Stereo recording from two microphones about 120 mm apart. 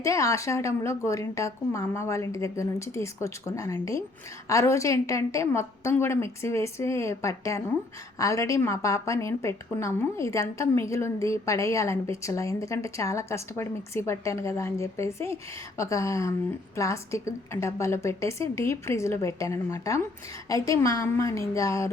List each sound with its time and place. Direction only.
0.0 s a woman's voice: 25° left (ahead or behind)